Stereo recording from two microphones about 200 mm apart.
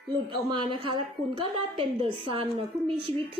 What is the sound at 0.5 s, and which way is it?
A woman's voice, 25° right (ahead or behind).